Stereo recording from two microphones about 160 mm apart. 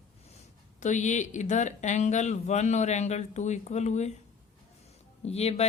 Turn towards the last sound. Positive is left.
turn(degrees=40)  # may be behind; listen again after turning